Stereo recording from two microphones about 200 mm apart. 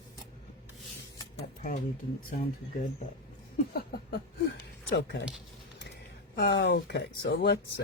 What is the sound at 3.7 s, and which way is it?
Speech, 50° left (ahead or behind).